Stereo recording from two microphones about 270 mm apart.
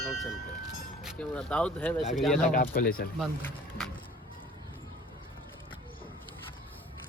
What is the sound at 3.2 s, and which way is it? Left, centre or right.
Speech, centre.